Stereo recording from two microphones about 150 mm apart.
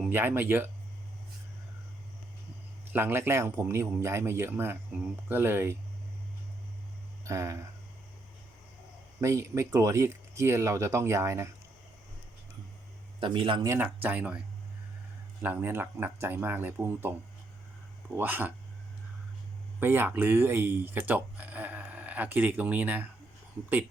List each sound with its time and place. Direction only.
0.0 s a man's voice: 15° right (ahead or behind)
2.9 s a man's voice: 15° right (ahead or behind)
7.3 s speech: 20° right (ahead or behind)
9.2 s speech: 20° right (ahead or behind)
13.1 s a man's voice: 35° right (ahead or behind)
13.7 s a man's voice: 10° right (ahead or behind)
15.4 s a man's voice: 10° right (ahead or behind)
18.2 s a man's voice: 10° right (ahead or behind)
19.8 s speech: 15° right (ahead or behind)